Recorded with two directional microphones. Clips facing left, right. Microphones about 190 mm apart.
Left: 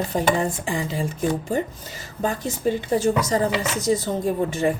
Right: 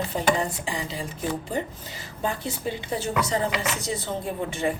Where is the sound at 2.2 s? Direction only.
45° left (ahead or behind).